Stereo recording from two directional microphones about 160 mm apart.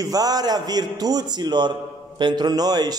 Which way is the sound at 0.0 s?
25° right (ahead or behind).